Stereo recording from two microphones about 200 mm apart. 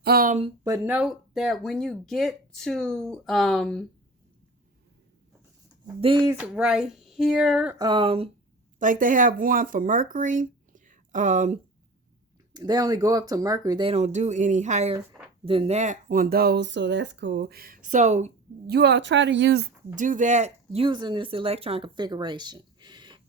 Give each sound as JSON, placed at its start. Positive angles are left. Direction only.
{"t": 0.0, "sound": "speech", "side_deg": -45}
{"t": 0.6, "sound": "speech", "side_deg": -15}
{"t": 0.9, "sound": "speech", "side_deg": 0}
{"t": 6.0, "sound": "speech", "side_deg": -25}
{"t": 6.3, "sound": "speech", "side_deg": -5}
{"t": 7.8, "sound": "speech", "side_deg": -25}
{"t": 8.8, "sound": "speech", "side_deg": -40}
{"t": 12.5, "sound": "speech", "side_deg": -20}
{"t": 18.7, "sound": "speech", "side_deg": -60}
{"t": 20.0, "sound": "speech", "side_deg": -40}